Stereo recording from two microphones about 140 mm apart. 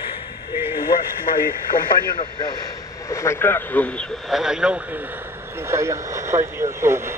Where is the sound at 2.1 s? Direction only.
35° left (ahead or behind).